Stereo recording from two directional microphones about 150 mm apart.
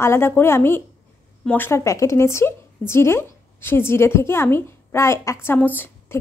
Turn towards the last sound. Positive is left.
turn(degrees=15)  # may be behind; listen again after turning